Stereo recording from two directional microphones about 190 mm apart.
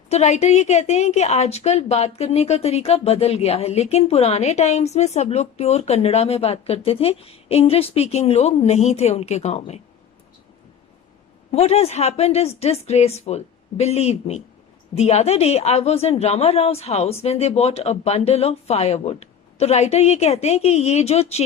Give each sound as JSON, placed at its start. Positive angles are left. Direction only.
{"t": 0.1, "sound": "a woman's voice", "side_deg": 35}
{"t": 11.5, "sound": "a woman's voice", "side_deg": 35}